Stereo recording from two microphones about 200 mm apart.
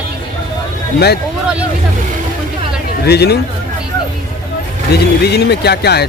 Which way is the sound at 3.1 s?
55° left (ahead or behind).